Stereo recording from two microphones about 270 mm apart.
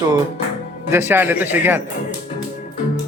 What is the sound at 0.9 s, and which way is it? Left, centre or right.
Speech, centre.